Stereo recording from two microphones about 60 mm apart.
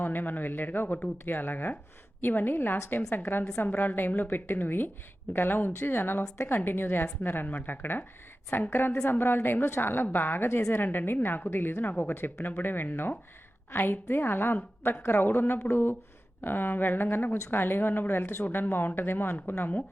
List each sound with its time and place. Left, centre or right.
0.0 s a woman's voice: left
6.2 s a woman's voice: left
6.7 s a woman's voice: left